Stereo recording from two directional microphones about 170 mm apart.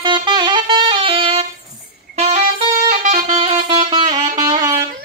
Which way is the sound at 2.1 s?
40° right (ahead or behind).